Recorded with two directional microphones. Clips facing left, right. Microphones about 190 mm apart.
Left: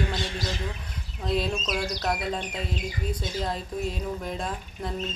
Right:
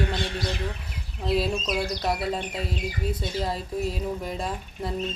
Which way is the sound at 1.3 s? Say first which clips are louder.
Right 2 dB; 5° right (ahead or behind).